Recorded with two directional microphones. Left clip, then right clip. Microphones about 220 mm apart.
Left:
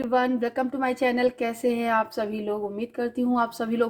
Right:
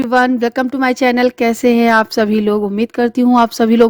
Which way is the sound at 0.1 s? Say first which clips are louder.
Right 11 dB; 35° right (ahead or behind).